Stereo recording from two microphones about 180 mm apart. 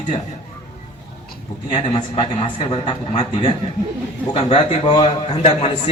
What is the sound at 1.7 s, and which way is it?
A man's voice, 35° left (ahead or behind).